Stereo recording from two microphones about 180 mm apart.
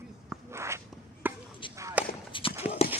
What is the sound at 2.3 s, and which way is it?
Horse, 30° left (ahead or behind).